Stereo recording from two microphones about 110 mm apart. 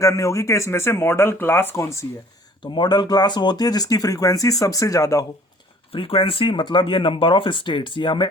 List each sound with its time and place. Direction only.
0.0 s speech: 30° left (ahead or behind)
2.7 s speech: 40° left (ahead or behind)
5.9 s speech: 55° left (ahead or behind)